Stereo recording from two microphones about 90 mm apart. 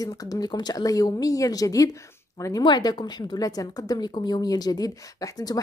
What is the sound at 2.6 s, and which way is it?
Speech, 55° left (ahead or behind).